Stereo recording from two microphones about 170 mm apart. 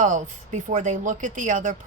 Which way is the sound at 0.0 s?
50° right (ahead or behind).